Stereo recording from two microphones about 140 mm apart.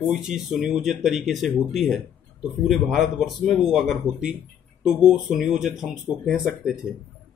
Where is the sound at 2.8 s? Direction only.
Centre (ahead or behind).